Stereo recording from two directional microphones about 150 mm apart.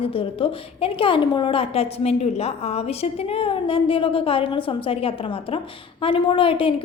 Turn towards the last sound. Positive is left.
turn(degrees=35)  # may be behind; listen again after turning